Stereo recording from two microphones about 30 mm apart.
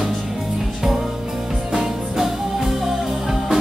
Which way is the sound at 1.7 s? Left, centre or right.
Centre.